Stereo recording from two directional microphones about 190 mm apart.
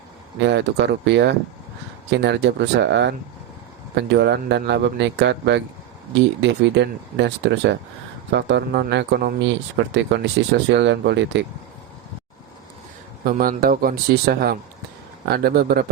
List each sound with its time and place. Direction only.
0.3 s speech: 65° right (ahead or behind)
13.2 s speech: 50° right (ahead or behind)